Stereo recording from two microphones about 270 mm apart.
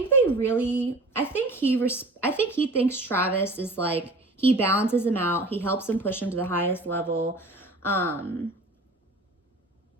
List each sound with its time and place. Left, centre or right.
0.1 s speech: centre